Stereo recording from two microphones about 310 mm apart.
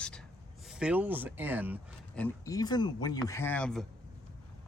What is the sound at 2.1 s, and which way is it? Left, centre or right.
Speech, centre.